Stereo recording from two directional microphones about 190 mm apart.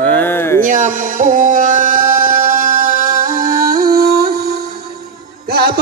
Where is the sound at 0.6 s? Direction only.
40° right (ahead or behind).